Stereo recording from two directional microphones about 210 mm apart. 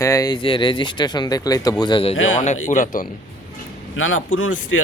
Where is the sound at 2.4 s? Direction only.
35° left (ahead or behind).